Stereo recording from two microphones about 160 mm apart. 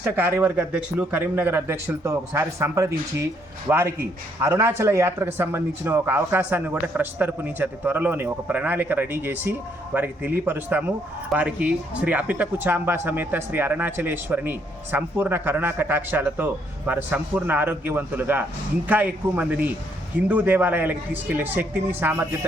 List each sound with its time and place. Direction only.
0.0 s speech: 15° right (ahead or behind)